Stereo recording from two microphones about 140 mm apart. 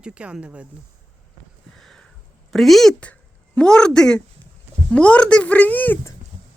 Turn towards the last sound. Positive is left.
turn(degrees=15)  # may be behind; listen again after turning